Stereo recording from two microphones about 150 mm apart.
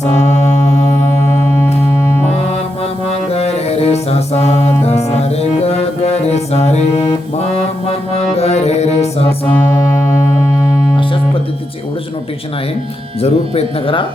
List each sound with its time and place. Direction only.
3.1 s music: 45° left (ahead or behind)
13.2 s speech: 45° left (ahead or behind)